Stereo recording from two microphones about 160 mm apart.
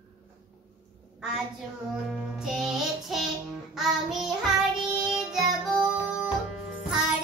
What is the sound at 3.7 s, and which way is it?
Child singing, centre (ahead or behind).